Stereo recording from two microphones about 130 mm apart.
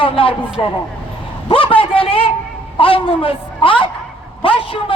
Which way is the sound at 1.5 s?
45° left (ahead or behind).